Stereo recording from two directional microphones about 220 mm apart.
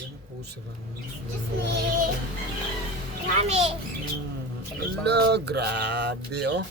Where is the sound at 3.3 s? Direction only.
30° right (ahead or behind).